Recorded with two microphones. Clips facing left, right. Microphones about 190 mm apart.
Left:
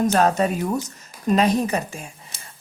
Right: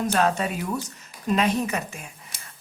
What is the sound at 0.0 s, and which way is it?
Speech, 40° left (ahead or behind).